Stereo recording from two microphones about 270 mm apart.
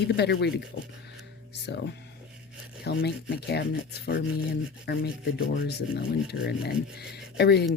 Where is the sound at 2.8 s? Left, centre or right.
Left.